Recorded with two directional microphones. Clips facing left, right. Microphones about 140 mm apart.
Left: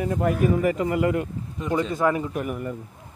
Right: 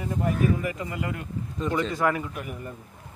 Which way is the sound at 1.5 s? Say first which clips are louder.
Left 2 dB; 15° left (ahead or behind).